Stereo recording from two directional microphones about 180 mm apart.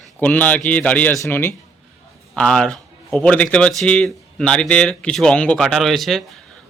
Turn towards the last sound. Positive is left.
turn(degrees=0)  # may be behind; listen again after turning